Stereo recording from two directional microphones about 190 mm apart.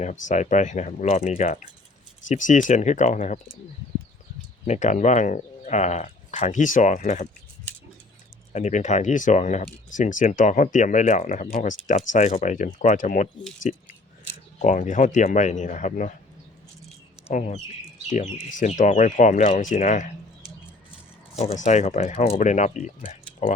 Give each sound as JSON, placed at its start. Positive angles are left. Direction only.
{"t": 0.0, "sound": "speech", "side_deg": 40}
{"t": 4.6, "sound": "speech", "side_deg": 40}
{"t": 8.5, "sound": "speech", "side_deg": 40}
{"t": 17.2, "sound": "speech", "side_deg": 40}
{"t": 21.3, "sound": "speech", "side_deg": 40}